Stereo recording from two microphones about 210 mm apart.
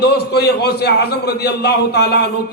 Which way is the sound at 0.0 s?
50° left (ahead or behind).